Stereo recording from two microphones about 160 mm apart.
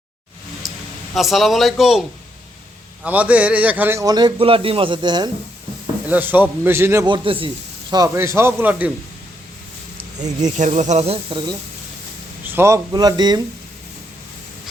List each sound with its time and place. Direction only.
1.1 s a man's voice: centre (ahead or behind); by 5.3 s 30° right (ahead or behind)
6.1 s a man's voice: 10° right (ahead or behind)
7.0 s a man's voice: 30° right (ahead or behind); by 8.9 s 10° right (ahead or behind)
10.2 s speech: 45° right (ahead or behind); by 11.5 s 30° right (ahead or behind)
12.5 s a man's voice: 15° right (ahead or behind)